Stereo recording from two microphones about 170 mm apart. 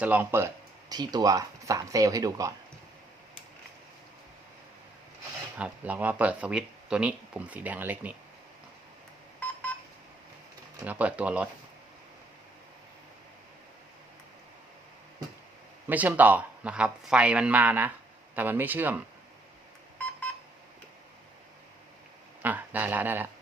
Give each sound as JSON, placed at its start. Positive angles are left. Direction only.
{"t": 0.0, "sound": "speech", "side_deg": -10}
{"t": 5.5, "sound": "speech", "side_deg": -10}
{"t": 10.8, "sound": "speech", "side_deg": -10}
{"t": 15.9, "sound": "speech", "side_deg": -10}
{"t": 22.4, "sound": "speech", "side_deg": -10}